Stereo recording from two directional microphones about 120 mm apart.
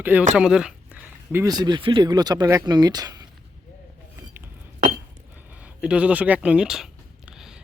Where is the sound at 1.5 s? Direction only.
35° right (ahead or behind).